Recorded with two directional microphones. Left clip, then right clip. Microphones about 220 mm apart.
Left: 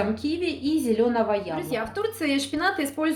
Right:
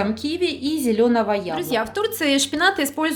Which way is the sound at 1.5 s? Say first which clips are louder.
Right 6 dB; 50° right (ahead or behind).